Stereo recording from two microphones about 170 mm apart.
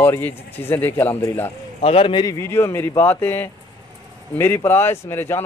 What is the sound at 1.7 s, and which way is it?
Speech, 35° left (ahead or behind).